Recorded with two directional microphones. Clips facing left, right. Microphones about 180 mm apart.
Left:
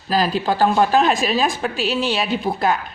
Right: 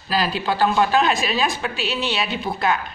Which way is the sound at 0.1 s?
45° left (ahead or behind).